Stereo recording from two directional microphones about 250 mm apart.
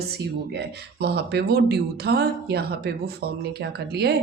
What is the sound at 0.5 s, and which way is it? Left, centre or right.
Speech, right.